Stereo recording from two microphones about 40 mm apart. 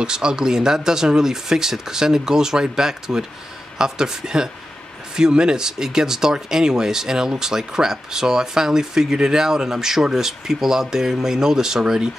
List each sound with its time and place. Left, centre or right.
0.0 s speech: centre